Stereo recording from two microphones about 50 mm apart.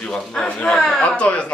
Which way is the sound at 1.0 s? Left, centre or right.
Left.